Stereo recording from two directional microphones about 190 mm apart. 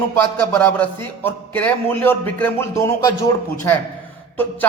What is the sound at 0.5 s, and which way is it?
A man's voice, 10° left (ahead or behind).